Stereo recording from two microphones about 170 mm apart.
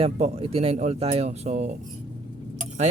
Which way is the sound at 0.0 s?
35° right (ahead or behind).